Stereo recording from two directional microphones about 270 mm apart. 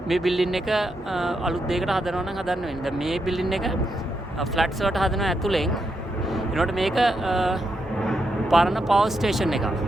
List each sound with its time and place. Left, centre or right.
0.1 s speech: centre